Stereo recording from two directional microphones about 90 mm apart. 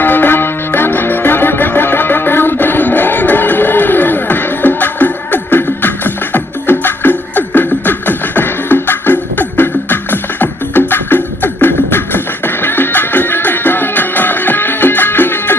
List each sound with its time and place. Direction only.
0.0 s music: 20° left (ahead or behind)